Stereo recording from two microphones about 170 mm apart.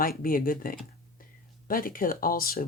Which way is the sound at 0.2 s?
55° left (ahead or behind).